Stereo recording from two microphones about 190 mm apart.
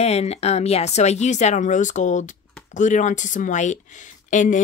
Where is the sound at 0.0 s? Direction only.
35° left (ahead or behind).